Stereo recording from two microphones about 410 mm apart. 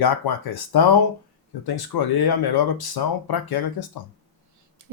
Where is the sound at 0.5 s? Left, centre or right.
Left.